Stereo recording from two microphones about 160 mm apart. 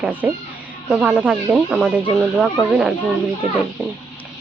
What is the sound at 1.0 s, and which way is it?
Speech, 5° right (ahead or behind).